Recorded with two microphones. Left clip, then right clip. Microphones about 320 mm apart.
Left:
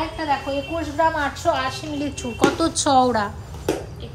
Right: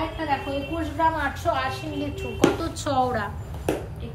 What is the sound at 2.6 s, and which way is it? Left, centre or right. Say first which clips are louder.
Speech: left 7 dB; centre.